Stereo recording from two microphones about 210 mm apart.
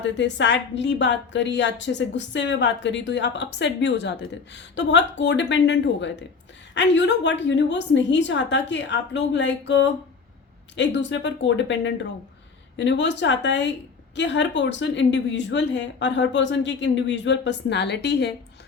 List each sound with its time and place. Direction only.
0.0 s a woman's voice: 60° left (ahead or behind)